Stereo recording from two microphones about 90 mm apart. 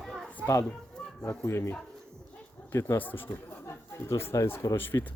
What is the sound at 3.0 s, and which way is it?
Speech, 20° left (ahead or behind).